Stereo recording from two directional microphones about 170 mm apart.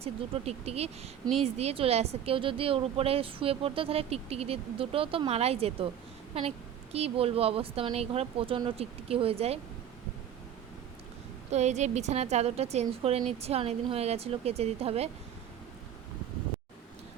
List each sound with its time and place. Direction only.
0.0 s speech: 35° right (ahead or behind)
11.5 s speech: 40° right (ahead or behind)